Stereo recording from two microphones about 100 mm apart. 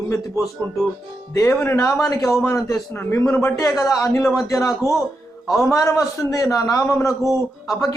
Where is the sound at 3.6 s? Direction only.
30° left (ahead or behind).